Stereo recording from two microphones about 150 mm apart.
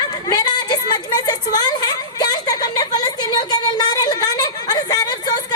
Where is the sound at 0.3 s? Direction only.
30° left (ahead or behind).